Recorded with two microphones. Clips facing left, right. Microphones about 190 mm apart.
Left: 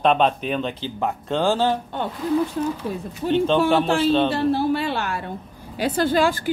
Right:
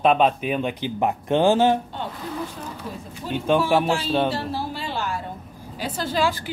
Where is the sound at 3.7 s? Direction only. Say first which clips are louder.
Left 3 dB; 10° right (ahead or behind).